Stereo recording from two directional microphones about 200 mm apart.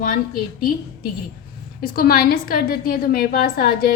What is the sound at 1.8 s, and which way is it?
A woman's voice, 50° left (ahead or behind).